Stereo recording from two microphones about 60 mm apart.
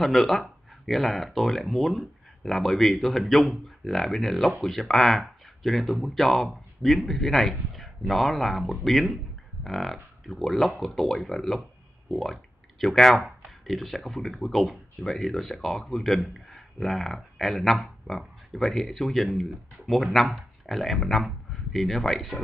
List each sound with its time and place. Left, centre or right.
0.0 s speech: centre